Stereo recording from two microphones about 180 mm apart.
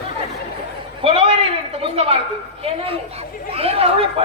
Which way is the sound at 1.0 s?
30° right (ahead or behind).